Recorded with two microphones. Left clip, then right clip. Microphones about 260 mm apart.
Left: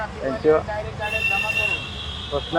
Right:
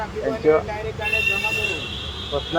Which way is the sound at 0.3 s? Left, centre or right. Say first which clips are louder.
Even; centre.